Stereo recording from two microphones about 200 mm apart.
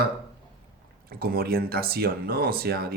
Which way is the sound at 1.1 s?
50° right (ahead or behind).